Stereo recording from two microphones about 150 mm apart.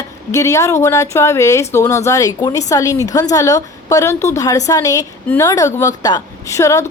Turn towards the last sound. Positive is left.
turn(degrees=20)  # may be behind; listen again after turning